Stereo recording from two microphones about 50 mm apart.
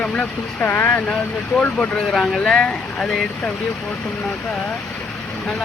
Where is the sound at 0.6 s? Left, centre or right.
Left.